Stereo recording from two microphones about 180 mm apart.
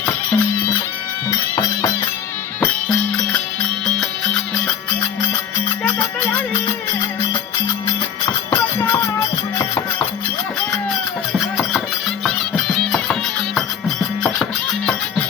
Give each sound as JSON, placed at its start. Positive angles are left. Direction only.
{"t": 0.0, "sound": "music", "side_deg": 10}
{"t": 5.8, "sound": "music", "side_deg": 15}
{"t": 8.4, "sound": "music", "side_deg": 15}
{"t": 11.3, "sound": "a sound", "side_deg": 0}
{"t": 12.2, "sound": "music", "side_deg": 0}